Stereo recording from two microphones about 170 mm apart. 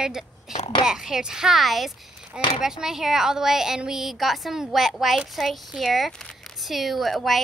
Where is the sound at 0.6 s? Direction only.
30° left (ahead or behind).